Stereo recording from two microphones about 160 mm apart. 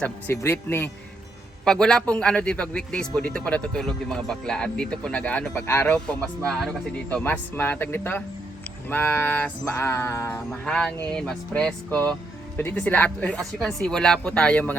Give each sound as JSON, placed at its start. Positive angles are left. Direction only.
{"t": 0.0, "sound": "a man's voice", "side_deg": 10}
{"t": 10.5, "sound": "a man's voice", "side_deg": 5}